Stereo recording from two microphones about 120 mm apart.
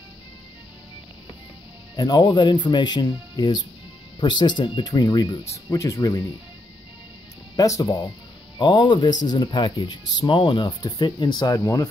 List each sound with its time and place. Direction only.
2.0 s speech: 35° left (ahead or behind)
7.5 s speech: 30° left (ahead or behind)